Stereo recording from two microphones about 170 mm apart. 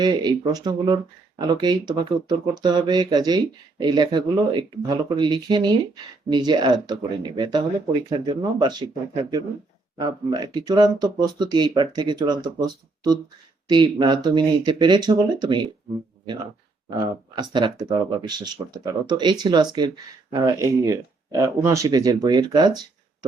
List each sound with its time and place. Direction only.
0.0 s speech: 25° right (ahead or behind)
10.0 s speech: 25° right (ahead or behind)
17.0 s speech: 25° right (ahead or behind)